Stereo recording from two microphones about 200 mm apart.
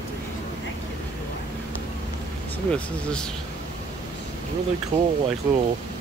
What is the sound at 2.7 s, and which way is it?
Speech, 5° left (ahead or behind).